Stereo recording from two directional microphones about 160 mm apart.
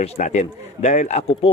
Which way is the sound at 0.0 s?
50° left (ahead or behind).